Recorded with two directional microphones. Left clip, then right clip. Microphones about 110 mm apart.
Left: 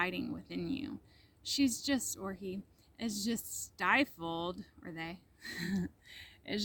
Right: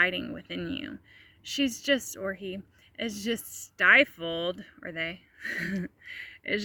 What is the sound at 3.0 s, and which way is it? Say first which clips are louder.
Speech: right 6 dB; 35° left (ahead or behind).